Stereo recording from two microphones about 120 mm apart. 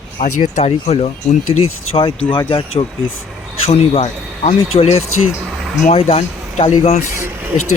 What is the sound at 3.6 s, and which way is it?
Speech, 60° left (ahead or behind).